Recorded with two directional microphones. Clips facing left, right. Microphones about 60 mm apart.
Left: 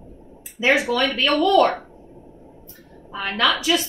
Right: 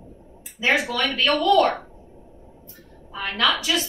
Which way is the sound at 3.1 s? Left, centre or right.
Centre.